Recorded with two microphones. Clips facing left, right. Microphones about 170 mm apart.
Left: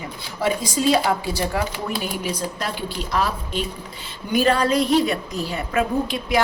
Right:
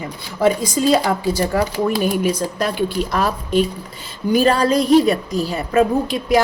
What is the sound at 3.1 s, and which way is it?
Speech, 45° right (ahead or behind).